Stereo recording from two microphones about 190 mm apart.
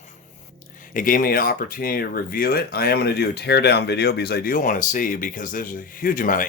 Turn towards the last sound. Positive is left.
turn(degrees=45)  # may be behind; listen again after turning